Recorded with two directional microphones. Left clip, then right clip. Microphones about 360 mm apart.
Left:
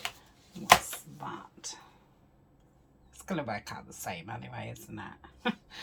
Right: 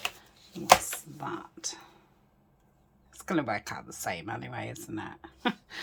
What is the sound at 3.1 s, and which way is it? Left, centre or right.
Speech, centre.